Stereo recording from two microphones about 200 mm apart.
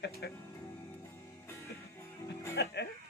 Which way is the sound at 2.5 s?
55° left (ahead or behind).